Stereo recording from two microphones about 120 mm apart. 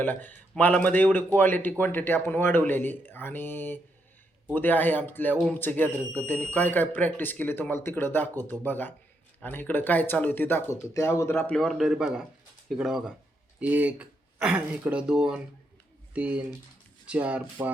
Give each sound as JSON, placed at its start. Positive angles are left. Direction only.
{"t": 0.0, "sound": "speech", "side_deg": 15}
{"t": 11.3, "sound": "a man's voice", "side_deg": 5}